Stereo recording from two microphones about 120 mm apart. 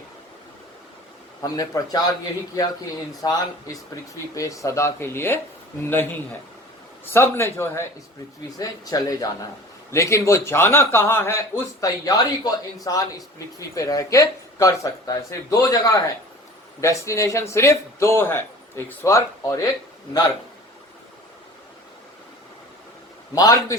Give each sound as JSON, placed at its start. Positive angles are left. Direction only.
{"t": 1.4, "sound": "a man's voice", "side_deg": 30}
{"t": 3.2, "sound": "a man's voice", "side_deg": 30}
{"t": 23.3, "sound": "a man's voice", "side_deg": 30}